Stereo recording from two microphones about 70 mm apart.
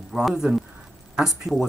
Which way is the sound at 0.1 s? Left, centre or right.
Centre.